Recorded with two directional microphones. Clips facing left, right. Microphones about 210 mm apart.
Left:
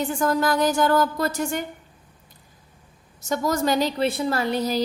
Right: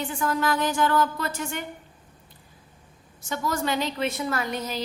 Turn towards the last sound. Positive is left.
turn(degrees=35)  # may be behind; listen again after turning